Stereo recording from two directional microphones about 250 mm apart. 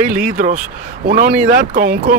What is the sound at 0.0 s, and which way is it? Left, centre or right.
Speech, right.